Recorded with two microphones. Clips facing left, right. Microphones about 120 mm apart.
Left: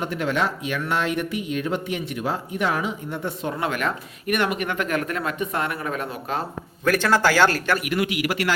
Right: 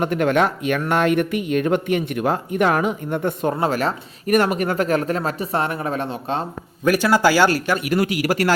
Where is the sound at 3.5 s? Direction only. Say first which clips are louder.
Right 4 dB; 35° right (ahead or behind).